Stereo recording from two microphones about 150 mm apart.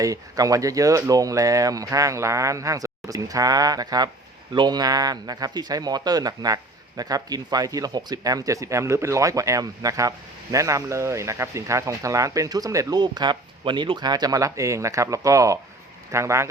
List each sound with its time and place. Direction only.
0.0 s speech: 25° right (ahead or behind)